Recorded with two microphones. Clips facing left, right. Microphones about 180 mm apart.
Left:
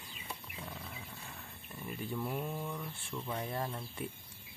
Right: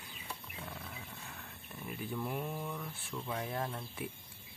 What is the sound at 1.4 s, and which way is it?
Speech, centre (ahead or behind).